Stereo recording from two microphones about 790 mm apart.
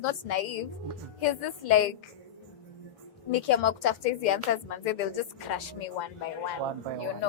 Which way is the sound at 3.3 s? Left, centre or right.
Left.